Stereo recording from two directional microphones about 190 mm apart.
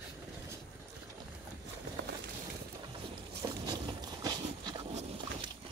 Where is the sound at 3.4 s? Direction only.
20° right (ahead or behind).